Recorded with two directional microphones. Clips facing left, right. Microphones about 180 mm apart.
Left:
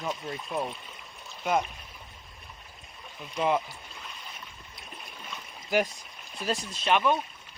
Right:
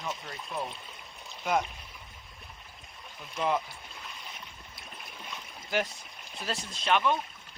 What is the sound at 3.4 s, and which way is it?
Speech, 10° left (ahead or behind).